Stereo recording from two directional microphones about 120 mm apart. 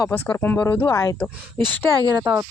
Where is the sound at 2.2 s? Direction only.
25° right (ahead or behind).